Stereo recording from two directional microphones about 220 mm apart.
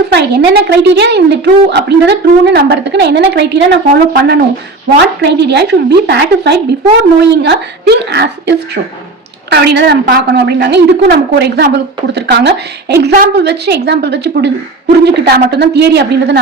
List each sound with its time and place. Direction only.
0.1 s a woman's voice: 50° right (ahead or behind)